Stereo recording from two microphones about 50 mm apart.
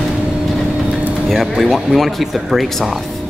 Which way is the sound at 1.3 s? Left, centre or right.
Centre.